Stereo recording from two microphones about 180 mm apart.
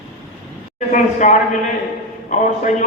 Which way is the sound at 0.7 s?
45° left (ahead or behind).